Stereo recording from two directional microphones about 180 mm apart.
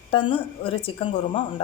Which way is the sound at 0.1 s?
30° left (ahead or behind).